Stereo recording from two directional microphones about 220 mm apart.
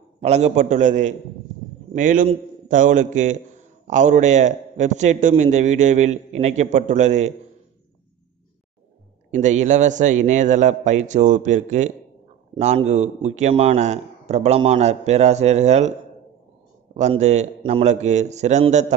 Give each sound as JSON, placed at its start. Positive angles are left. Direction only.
{"t": 0.2, "sound": "a man's voice", "side_deg": -30}
{"t": 9.3, "sound": "a man's voice", "side_deg": -30}
{"t": 16.9, "sound": "a man's voice", "side_deg": -30}